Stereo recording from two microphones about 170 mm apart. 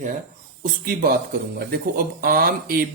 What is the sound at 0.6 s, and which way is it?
Speech, 60° right (ahead or behind).